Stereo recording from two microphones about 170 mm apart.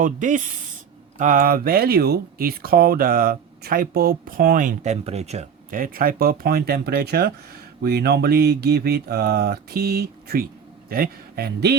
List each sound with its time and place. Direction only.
0.0 s speech: 50° right (ahead or behind); by 11.8 s 70° right (ahead or behind)